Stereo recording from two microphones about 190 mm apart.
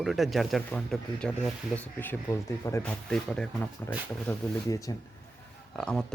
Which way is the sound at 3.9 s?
15° left (ahead or behind).